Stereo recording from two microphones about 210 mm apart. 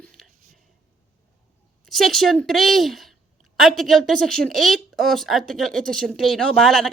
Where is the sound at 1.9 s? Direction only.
Centre (ahead or behind).